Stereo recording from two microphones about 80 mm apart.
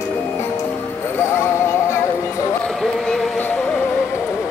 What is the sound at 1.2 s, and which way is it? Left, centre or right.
Music, left.